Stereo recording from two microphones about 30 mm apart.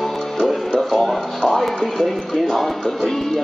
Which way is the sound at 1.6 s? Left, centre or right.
Centre.